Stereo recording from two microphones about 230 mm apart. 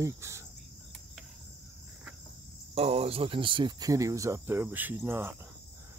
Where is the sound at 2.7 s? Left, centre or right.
Right; by 5.3 s centre.